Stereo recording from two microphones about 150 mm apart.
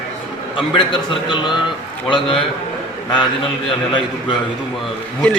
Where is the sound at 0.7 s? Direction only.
35° left (ahead or behind).